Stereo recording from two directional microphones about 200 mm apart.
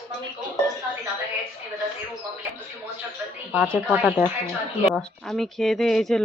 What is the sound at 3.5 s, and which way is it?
Speech, centre (ahead or behind).